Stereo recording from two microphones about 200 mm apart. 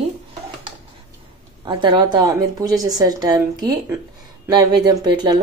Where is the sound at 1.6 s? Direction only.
25° right (ahead or behind).